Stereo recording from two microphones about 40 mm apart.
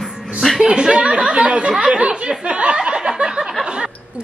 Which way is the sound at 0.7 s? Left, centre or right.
Right.